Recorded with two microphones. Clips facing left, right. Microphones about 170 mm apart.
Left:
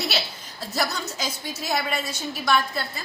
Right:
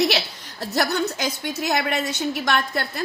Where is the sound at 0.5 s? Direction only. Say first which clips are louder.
Right 5 dB; 65° right (ahead or behind).